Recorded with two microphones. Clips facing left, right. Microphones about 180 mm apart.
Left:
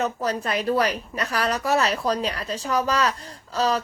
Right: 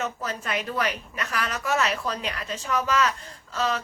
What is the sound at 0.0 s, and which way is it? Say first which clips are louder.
A woman's voice: left 6 dB; 35° left (ahead or behind).